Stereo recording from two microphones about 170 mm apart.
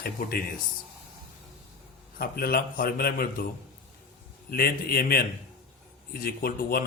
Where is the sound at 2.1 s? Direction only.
60° left (ahead or behind).